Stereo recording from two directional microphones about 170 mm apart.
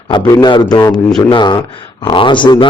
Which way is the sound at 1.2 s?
25° left (ahead or behind).